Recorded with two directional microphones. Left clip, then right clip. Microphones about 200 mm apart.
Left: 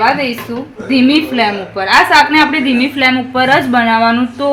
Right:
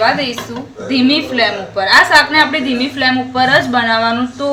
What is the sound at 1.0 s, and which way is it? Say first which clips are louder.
A woman's voice: left 1 dB; 45° left (ahead or behind).